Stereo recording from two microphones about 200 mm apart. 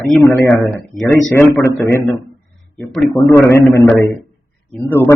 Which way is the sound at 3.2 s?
15° left (ahead or behind).